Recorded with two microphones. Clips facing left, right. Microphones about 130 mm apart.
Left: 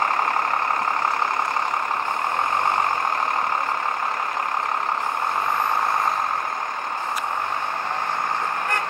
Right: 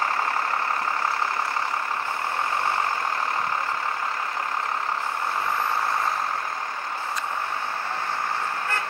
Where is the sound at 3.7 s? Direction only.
55° left (ahead or behind).